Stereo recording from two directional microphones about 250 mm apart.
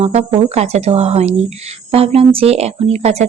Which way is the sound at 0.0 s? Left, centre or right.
Right.